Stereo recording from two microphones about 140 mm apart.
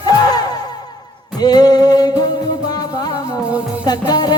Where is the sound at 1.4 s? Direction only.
30° left (ahead or behind).